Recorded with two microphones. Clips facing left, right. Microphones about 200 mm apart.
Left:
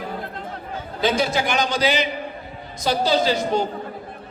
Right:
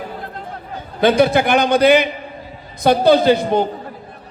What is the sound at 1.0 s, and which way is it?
A man's voice, 60° right (ahead or behind).